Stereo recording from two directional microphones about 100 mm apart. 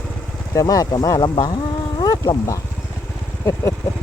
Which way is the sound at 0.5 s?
35° left (ahead or behind).